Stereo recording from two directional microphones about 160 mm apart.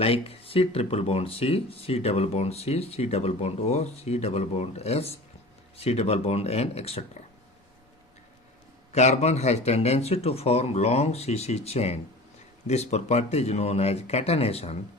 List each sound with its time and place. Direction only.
0.0 s speech: 35° left (ahead or behind)
8.9 s speech: 45° left (ahead or behind)